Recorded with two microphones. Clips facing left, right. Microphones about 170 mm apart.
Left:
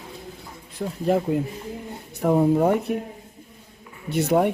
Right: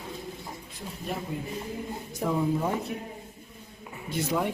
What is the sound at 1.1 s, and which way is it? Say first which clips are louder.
Speech: left 13 dB; 90° left.